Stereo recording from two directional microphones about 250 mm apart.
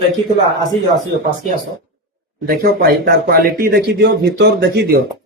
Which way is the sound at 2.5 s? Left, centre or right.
Right.